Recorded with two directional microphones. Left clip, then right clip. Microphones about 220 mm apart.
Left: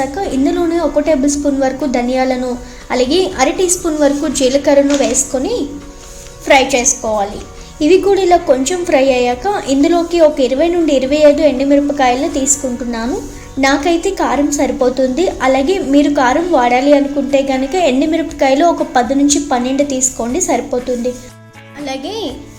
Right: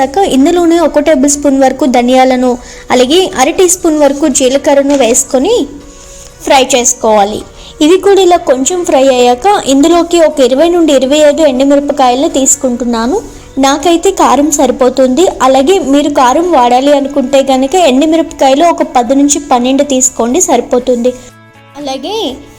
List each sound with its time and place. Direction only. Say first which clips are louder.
0.0 s a woman's voice: right 8 dB; 35° right (ahead or behind)
6.4 s music: right 3 dB; 30° right (ahead or behind)
6.7 s a woman's voice: right 7 dB; 35° right (ahead or behind)